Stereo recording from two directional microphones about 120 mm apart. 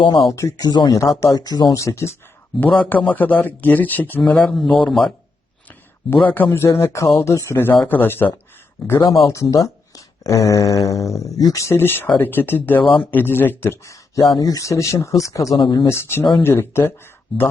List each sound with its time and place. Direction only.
0.2 s speech: 30° left (ahead or behind)
2.7 s speech: 15° left (ahead or behind)
4.4 s a man's voice: 5° left (ahead or behind)
6.3 s speech: 15° left (ahead or behind)
8.9 s speech: 30° left (ahead or behind)
12.8 s speech: 45° left (ahead or behind)
13.1 s speech: 15° left (ahead or behind)
15.6 s speech: 40° left (ahead or behind)
15.9 s speech: 20° left (ahead or behind)